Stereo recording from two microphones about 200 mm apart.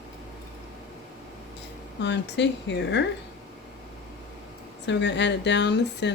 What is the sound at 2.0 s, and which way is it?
Speech, 60° left (ahead or behind).